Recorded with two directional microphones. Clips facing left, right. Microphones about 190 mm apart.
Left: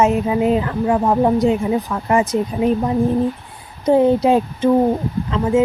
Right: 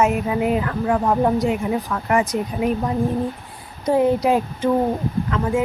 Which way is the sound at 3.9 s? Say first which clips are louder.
Left 4 dB; 25° left (ahead or behind).